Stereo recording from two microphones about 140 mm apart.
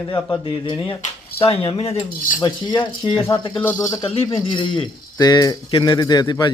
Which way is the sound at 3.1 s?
20° left (ahead or behind).